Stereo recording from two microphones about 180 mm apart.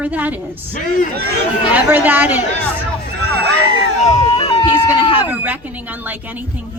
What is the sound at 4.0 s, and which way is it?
Speech, 40° left (ahead or behind).